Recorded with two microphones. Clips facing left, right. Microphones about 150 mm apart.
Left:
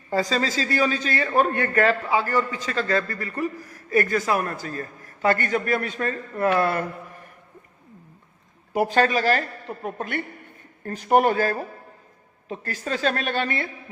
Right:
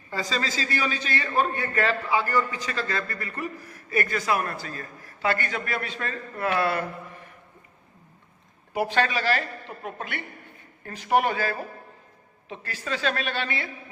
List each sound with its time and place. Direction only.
0.1 s a man's voice: 40° left (ahead or behind)
1.5 s speech: 55° left (ahead or behind)
2.0 s a man's voice: 35° left (ahead or behind)
8.7 s a man's voice: 40° left (ahead or behind)